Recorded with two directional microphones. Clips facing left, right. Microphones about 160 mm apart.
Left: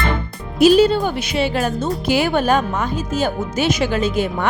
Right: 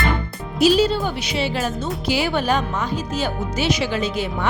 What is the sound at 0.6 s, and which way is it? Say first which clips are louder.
Speech: left 4 dB; 55° left (ahead or behind).